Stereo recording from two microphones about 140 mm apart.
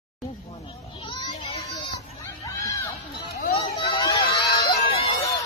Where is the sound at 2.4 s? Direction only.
25° left (ahead or behind).